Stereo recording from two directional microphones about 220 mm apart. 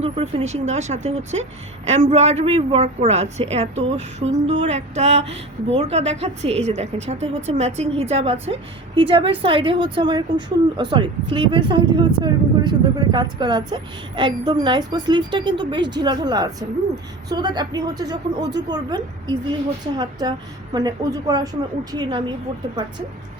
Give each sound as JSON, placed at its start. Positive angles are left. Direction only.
{"t": 0.0, "sound": "a woman's voice", "side_deg": -25}